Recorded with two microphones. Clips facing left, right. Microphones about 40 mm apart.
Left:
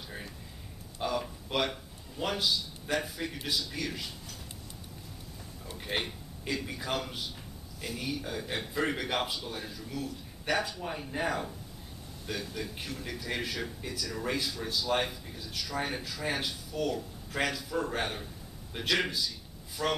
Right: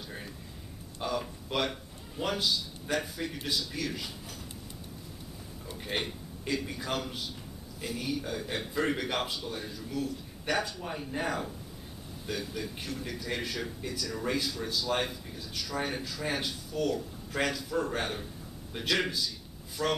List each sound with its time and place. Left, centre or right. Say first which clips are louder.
0.9 s a man's voice: left 1 dB; centre
5.7 s a man's voice: even; centre